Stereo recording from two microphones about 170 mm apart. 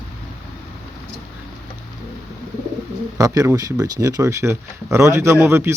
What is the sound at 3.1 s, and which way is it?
Speech, 20° right (ahead or behind).